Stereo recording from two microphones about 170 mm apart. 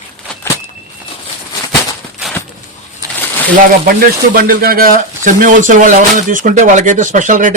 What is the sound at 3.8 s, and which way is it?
Speech, 60° right (ahead or behind).